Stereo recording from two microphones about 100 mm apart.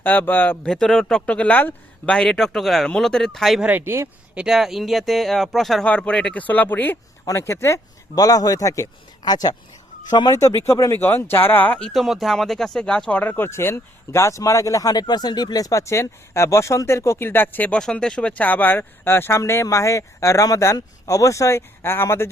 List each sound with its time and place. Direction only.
0.0 s speech: 15° left (ahead or behind)
0.6 s speech: 5° left (ahead or behind)
3.6 s speech: 20° right (ahead or behind)
4.4 s a man's voice: 5° right (ahead or behind); by 10.9 s 30° left (ahead or behind)
11.0 s speech: 20° left (ahead or behind)
17.7 s speech: 5° left (ahead or behind); by 22.3 s 25° left (ahead or behind)